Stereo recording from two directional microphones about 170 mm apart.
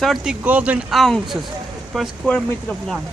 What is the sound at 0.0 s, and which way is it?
Speech, centre (ahead or behind).